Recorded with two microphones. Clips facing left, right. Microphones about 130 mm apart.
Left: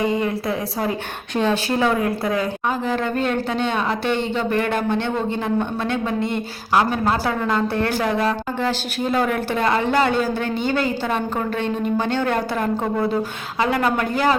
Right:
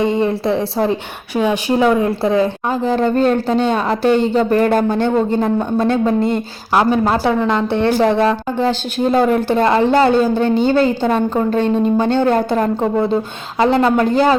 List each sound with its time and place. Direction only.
0.0 s a woman's voice: 30° right (ahead or behind)
1.3 s speech: 10° right (ahead or behind)
2.0 s a woman's voice: 25° right (ahead or behind)